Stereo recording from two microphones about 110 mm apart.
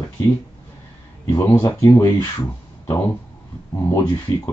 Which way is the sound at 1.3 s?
30° left (ahead or behind).